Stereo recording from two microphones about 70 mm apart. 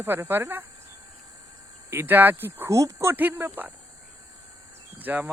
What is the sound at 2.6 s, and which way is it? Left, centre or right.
Speech, right.